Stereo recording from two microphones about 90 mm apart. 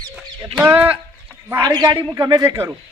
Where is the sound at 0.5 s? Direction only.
20° right (ahead or behind).